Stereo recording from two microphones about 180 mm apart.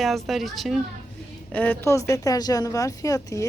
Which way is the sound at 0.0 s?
Centre (ahead or behind).